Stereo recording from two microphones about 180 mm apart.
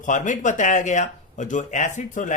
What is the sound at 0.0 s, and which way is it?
Speech, 45° left (ahead or behind).